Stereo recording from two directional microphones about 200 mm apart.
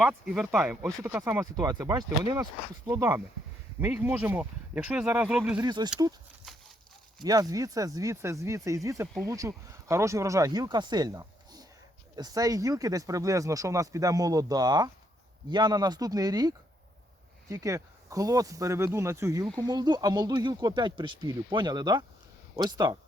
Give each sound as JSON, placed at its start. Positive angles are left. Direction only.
{"t": 0.0, "sound": "speech", "side_deg": -5}
{"t": 0.8, "sound": "speech", "side_deg": -15}
{"t": 5.6, "sound": "speech", "side_deg": -20}
{"t": 7.2, "sound": "speech", "side_deg": -20}